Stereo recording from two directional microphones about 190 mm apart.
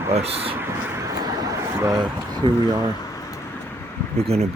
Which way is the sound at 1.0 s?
15° right (ahead or behind).